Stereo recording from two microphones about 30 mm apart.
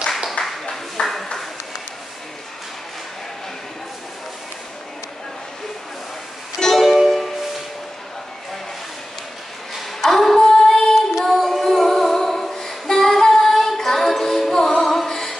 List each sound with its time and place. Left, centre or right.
0.4 s a sound: left
1.0 s ping: left
6.7 s music: centre
10.1 s female singing: centre
11.2 s singing: centre